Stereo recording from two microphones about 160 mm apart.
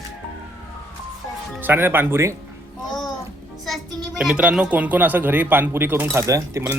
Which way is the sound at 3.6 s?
Centre (ahead or behind).